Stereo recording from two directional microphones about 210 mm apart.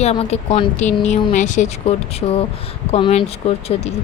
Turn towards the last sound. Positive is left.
turn(degrees=30)  # may be behind; listen again after turning